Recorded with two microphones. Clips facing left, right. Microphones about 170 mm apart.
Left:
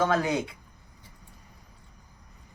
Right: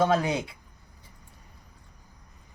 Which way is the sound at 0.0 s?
30° right (ahead or behind).